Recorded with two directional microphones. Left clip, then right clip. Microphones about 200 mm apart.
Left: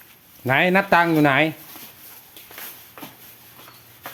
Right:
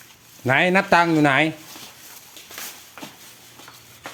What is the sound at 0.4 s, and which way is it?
Speech, 10° right (ahead or behind).